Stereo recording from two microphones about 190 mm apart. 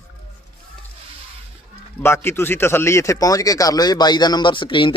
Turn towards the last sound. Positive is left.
turn(degrees=25)  # may be behind; listen again after turning